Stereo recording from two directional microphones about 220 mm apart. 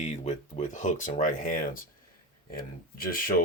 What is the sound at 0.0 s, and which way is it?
Speech, 30° left (ahead or behind).